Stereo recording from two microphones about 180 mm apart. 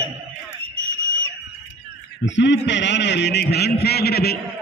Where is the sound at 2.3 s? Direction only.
80° left; by 4.4 s 60° left (ahead or behind).